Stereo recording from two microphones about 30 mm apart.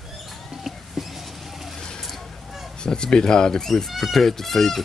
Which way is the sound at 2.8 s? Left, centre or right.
Left.